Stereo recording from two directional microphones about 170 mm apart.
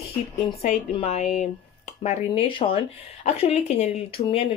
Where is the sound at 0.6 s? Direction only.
40° left (ahead or behind).